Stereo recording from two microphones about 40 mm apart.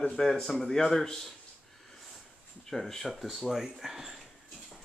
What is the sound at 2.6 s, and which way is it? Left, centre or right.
Speech, centre.